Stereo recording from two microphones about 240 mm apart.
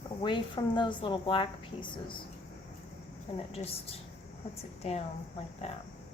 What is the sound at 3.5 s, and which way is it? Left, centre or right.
A woman's voice, left.